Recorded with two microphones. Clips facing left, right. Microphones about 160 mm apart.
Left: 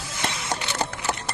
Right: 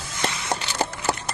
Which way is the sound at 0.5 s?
30° right (ahead or behind).